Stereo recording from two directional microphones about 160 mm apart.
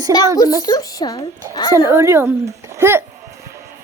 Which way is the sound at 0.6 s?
25° left (ahead or behind).